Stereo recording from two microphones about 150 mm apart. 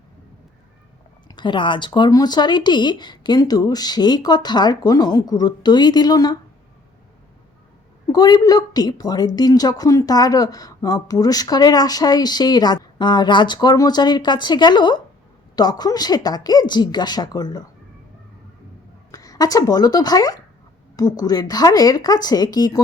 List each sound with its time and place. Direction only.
1.4 s a woman's voice: 30° left (ahead or behind)
8.1 s a woman's voice: 25° left (ahead or behind)
19.1 s a woman's voice: 25° left (ahead or behind)